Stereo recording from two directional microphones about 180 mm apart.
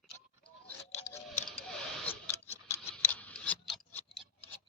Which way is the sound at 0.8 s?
35° left (ahead or behind).